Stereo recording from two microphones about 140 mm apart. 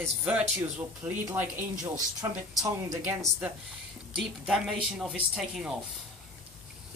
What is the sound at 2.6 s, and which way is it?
Speech, 20° right (ahead or behind).